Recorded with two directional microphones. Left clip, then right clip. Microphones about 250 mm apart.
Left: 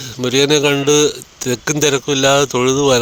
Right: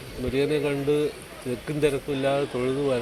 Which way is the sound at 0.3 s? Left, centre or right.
Left.